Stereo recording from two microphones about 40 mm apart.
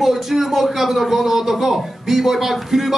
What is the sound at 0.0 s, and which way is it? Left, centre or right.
A man's voice, centre.